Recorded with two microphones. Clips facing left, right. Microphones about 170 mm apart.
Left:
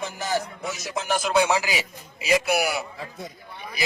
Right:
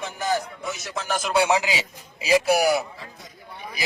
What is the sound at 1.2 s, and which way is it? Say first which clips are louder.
Speech: right 1 dB; 10° right (ahead or behind).